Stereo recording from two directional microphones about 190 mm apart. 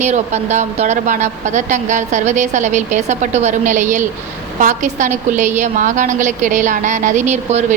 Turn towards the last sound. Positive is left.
turn(degrees=-35)  # may be behind; listen again after turning